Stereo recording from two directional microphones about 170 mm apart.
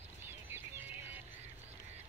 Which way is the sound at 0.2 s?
15° right (ahead or behind).